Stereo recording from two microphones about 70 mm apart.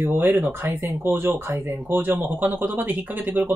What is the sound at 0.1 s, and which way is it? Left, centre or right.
Speech, right.